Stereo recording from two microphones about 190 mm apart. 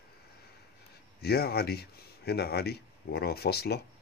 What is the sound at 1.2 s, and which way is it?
Speech, 55° left (ahead or behind).